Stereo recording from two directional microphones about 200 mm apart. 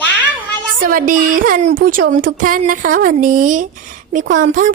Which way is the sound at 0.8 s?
45° right (ahead or behind).